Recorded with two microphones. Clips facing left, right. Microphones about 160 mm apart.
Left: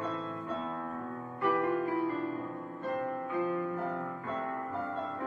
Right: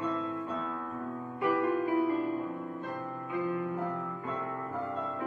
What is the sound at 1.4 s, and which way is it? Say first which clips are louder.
Music: right 1 dB; 10° right (ahead or behind).